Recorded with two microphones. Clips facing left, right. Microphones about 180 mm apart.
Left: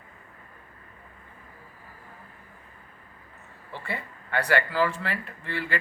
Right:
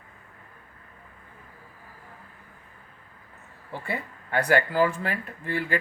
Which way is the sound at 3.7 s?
45° right (ahead or behind).